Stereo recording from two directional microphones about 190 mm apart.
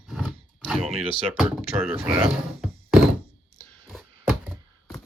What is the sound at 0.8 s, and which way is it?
Speech, 35° right (ahead or behind).